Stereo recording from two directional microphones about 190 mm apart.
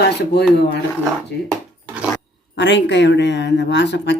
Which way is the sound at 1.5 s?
Centre (ahead or behind).